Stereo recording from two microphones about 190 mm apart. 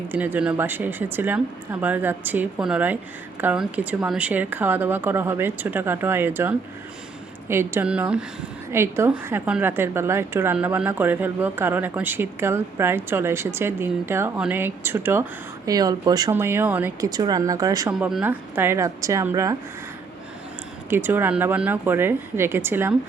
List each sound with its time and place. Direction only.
0.1 s a woman's voice: 10° right (ahead or behind)
20.9 s a woman's voice: 10° right (ahead or behind)